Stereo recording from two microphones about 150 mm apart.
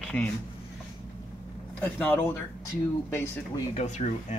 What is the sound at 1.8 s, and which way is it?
Speech, 10° left (ahead or behind).